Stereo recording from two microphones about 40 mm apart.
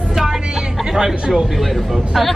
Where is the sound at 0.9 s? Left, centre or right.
Centre.